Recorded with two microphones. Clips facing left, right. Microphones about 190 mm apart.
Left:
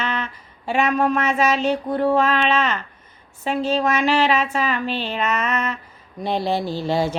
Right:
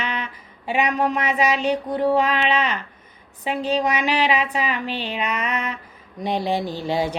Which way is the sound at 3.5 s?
15° right (ahead or behind).